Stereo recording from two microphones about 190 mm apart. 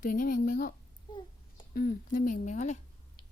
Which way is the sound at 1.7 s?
50° left (ahead or behind).